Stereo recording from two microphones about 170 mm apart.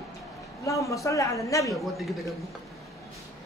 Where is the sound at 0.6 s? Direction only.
20° left (ahead or behind).